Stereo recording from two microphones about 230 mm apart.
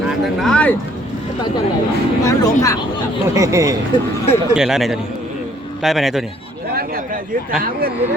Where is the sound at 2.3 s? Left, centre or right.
Centre.